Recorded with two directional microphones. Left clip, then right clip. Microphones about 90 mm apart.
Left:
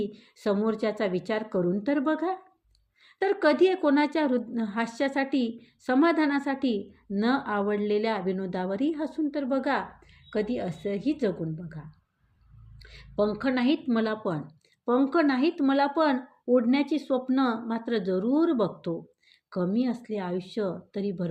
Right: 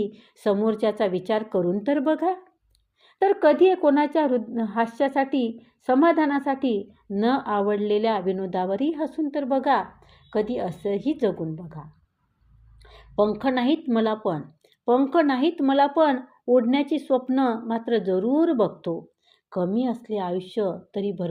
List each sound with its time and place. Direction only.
0.0 s a woman's voice: 20° right (ahead or behind)